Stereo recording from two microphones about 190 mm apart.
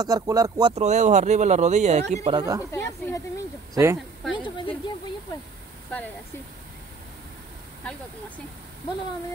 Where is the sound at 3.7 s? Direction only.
15° right (ahead or behind).